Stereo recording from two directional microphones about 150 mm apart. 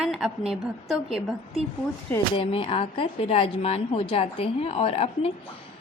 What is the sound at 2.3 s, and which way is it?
Speech, 35° left (ahead or behind).